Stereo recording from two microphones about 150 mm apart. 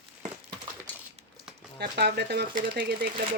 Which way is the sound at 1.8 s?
90° right.